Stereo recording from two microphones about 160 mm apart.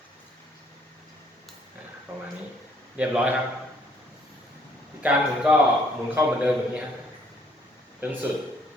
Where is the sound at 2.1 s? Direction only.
15° right (ahead or behind).